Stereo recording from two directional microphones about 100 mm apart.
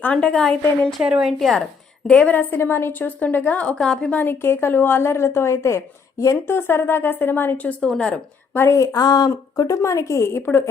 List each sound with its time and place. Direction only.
0.0 s a woman's voice: 10° left (ahead or behind)
1.0 s a woman's voice: 10° right (ahead or behind)
1.4 s a woman's voice: centre (ahead or behind)
2.0 s a woman's voice: 15° left (ahead or behind)
4.2 s a woman's voice: 20° left (ahead or behind)
8.5 s a woman's voice: 25° left (ahead or behind)